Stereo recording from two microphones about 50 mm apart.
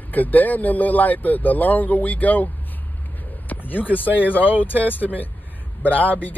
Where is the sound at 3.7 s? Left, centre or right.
Left.